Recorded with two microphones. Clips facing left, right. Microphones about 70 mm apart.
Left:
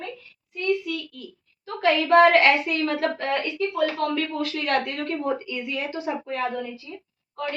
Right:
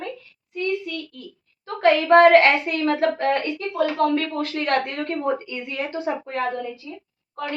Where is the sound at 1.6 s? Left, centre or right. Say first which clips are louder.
Right 4 dB; right.